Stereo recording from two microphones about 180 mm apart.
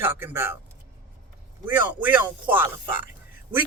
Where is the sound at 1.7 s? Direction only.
10° right (ahead or behind).